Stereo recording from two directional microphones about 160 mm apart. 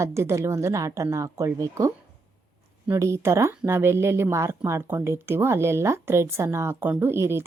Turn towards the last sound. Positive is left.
turn(degrees=-15)  # may be behind; listen again after turning